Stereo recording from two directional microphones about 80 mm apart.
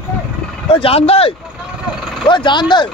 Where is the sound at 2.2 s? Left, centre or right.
Left.